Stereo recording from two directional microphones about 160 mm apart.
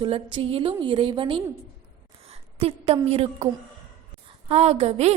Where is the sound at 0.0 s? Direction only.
35° right (ahead or behind).